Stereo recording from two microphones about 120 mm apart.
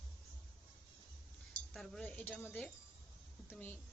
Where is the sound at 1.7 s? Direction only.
5° left (ahead or behind).